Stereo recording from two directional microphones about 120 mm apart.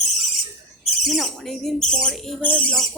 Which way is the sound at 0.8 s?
Centre (ahead or behind).